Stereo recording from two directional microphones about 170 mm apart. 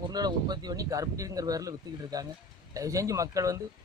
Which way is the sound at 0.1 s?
25° right (ahead or behind).